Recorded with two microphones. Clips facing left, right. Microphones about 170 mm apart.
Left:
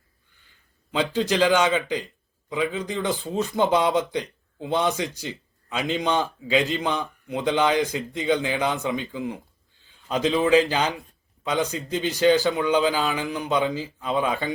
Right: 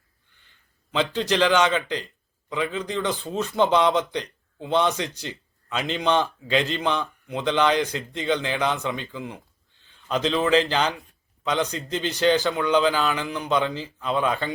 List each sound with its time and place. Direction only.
0.9 s speech: 15° left (ahead or behind)
5.1 s a sound: 10° left (ahead or behind)
5.7 s speech: 20° left (ahead or behind)